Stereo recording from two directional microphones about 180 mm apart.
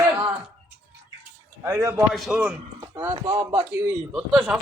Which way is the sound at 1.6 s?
15° right (ahead or behind).